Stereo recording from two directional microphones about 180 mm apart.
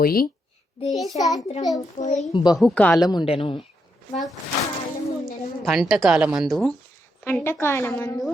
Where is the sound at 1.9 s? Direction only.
40° left (ahead or behind).